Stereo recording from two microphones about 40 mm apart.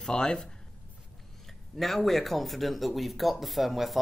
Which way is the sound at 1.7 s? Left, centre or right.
Centre.